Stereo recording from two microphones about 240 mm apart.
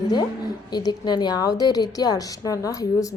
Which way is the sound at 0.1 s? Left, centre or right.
Centre.